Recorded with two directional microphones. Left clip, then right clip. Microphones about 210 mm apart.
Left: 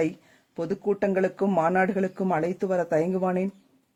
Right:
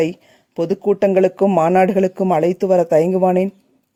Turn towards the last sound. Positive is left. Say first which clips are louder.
# right 11 dB
turn(degrees=-40)  # may be behind; listen again after turning